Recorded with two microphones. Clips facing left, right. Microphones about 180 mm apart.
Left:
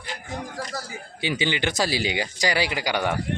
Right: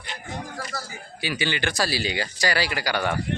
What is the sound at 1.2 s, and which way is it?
Speech, 20° left (ahead or behind).